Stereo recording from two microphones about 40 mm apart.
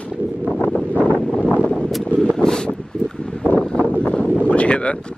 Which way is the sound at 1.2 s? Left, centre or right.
Left.